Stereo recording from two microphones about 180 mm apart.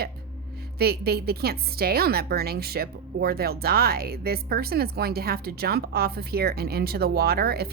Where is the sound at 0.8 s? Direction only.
60° right (ahead or behind).